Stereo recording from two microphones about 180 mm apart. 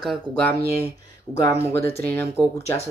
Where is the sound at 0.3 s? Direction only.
10° left (ahead or behind).